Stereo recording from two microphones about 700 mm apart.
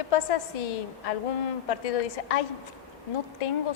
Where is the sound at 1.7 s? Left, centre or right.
Left.